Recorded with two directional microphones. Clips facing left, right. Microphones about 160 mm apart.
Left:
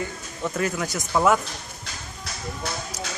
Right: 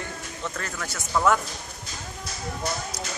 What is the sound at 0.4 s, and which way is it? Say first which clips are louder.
Speech: left 9 dB; 10° left (ahead or behind).